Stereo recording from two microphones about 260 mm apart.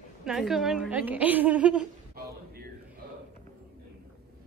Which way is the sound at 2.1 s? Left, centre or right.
Right.